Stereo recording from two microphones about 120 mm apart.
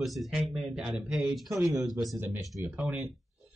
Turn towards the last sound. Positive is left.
turn(degrees=-10)  # may be behind; listen again after turning